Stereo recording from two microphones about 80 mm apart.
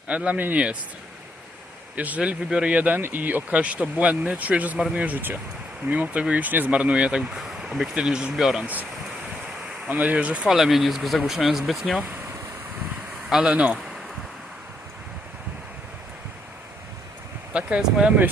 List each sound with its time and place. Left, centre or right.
0.1 s speech: centre
2.0 s speech: centre
8.6 s speech: centre
9.9 s speech: centre
13.3 s speech: centre
17.5 s speech: centre